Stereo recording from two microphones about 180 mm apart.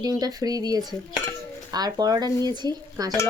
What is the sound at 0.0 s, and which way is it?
Speech, 20° right (ahead or behind).